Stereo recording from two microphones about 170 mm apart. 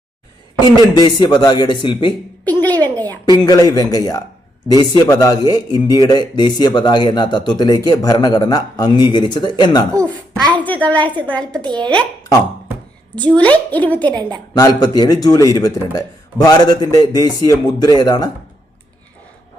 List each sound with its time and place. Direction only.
0.9 s a man's voice: 25° left (ahead or behind)
2.4 s a sound: 10° left (ahead or behind)
3.2 s a man's voice: 25° left (ahead or behind)
10.6 s a child's voice: 10° left (ahead or behind)
11.6 s a child's voice: 25° right (ahead or behind)
13.1 s a child's voice: 10° left (ahead or behind)
14.2 s a child's voice: 25° right (ahead or behind)
14.5 s a man's voice: 25° left (ahead or behind)